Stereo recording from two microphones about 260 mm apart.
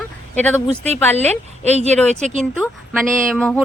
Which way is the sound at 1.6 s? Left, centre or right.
Right.